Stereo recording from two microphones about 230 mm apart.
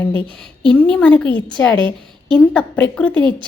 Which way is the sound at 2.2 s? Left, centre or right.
Centre.